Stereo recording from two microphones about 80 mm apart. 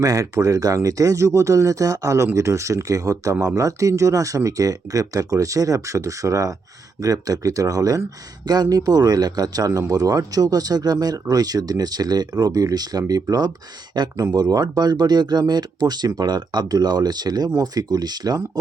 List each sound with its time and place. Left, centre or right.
0.0 s speech: right
14.0 s speech: right